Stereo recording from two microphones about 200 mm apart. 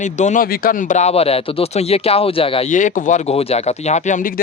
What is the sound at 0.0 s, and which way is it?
Speech, 35° left (ahead or behind).